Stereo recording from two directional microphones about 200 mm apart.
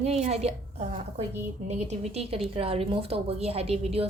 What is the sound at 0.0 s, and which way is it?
A woman's voice, 30° right (ahead or behind).